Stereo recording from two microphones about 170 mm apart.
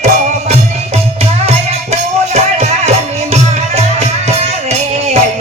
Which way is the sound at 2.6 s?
40° right (ahead or behind).